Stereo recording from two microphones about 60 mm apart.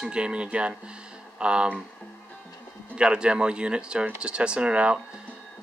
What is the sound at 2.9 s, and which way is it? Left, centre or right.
Speech, centre.